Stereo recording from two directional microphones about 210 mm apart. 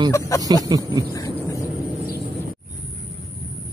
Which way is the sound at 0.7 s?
20° right (ahead or behind).